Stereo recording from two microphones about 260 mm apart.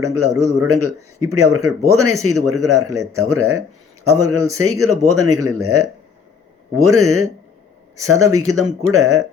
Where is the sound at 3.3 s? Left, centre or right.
Right.